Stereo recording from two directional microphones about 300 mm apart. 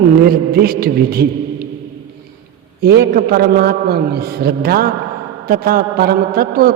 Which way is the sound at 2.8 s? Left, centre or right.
Right.